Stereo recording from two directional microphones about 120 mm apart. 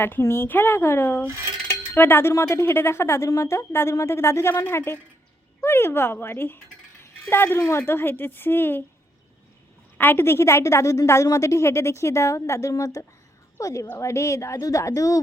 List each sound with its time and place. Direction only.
0.0 s a woman's voice: 20° left (ahead or behind)
10.0 s speech: 20° left (ahead or behind)